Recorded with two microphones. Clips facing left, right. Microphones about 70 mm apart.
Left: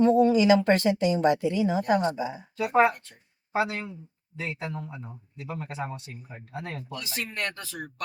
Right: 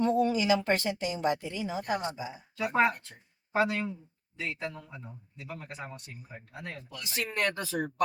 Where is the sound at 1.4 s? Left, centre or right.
Left.